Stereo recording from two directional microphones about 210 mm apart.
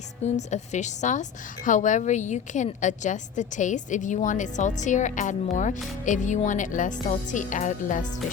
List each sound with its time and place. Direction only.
0.3 s speech: 35° left (ahead or behind)